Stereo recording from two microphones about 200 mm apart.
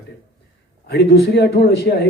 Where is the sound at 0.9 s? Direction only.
55° left (ahead or behind).